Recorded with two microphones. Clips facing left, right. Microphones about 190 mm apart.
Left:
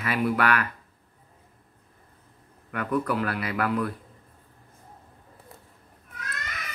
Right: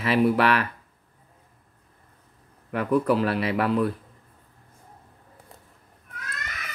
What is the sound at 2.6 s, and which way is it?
Speech, 30° right (ahead or behind).